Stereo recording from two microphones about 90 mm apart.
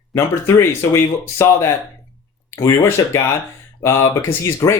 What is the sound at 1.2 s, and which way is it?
Speech, 30° left (ahead or behind).